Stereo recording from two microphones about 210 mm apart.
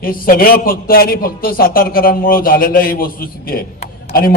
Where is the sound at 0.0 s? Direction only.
45° left (ahead or behind).